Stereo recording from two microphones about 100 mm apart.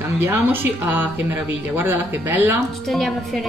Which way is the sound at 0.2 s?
20° right (ahead or behind).